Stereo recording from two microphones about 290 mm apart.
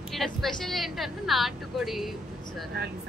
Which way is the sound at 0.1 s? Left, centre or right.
Centre.